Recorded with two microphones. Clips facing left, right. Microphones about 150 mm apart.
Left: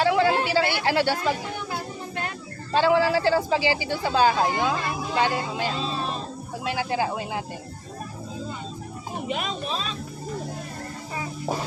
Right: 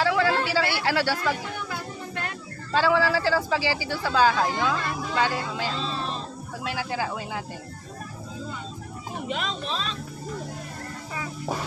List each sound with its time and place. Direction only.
0.0 s a sound: 20° left (ahead or behind)
1.7 s child singing: 35° left (ahead or behind)
2.7 s speech: 20° left (ahead or behind)
5.7 s music: 10° left (ahead or behind)
6.7 s speech: 20° left (ahead or behind)
9.2 s speech: 10° left (ahead or behind)